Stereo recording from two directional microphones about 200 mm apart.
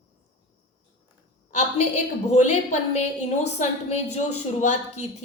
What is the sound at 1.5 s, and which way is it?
A woman's voice, 35° left (ahead or behind).